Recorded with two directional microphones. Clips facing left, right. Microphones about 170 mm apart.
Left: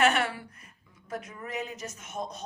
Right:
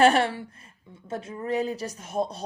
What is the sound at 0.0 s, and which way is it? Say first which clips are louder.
Speech: right 6 dB; 30° right (ahead or behind).